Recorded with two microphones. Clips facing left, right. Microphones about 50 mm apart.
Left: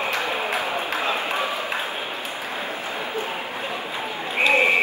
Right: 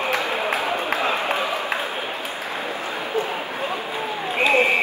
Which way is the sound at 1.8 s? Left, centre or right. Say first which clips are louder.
Right 2 dB; right.